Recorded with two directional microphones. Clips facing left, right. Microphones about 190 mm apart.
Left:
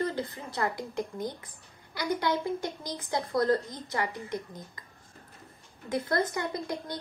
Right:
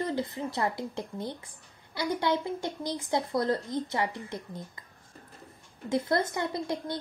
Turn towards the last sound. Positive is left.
turn(degrees=-25)  # may be behind; listen again after turning